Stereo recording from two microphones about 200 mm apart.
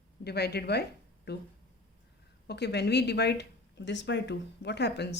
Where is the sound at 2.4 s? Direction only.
55° left (ahead or behind).